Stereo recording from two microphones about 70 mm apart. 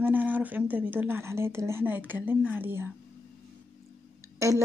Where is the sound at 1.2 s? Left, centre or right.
Right.